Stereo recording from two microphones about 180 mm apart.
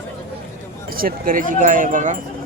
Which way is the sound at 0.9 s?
55° right (ahead or behind).